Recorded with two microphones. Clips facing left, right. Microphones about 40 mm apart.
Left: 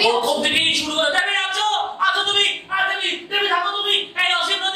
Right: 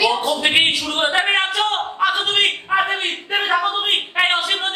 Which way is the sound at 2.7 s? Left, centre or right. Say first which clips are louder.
Right 3 dB; right.